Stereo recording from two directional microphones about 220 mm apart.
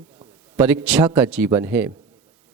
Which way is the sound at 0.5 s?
10° right (ahead or behind).